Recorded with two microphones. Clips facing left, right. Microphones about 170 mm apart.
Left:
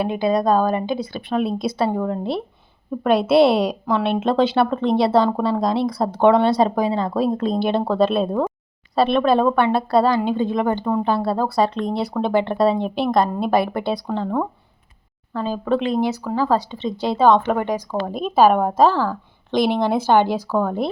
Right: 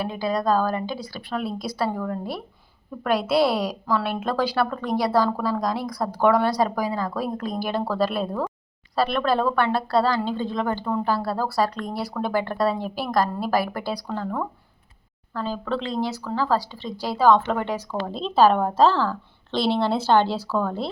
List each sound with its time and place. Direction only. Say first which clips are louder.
0.0 s a woman's voice: left 6 dB; 20° left (ahead or behind)